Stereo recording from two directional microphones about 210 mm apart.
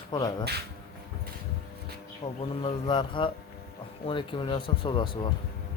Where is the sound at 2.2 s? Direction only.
25° left (ahead or behind).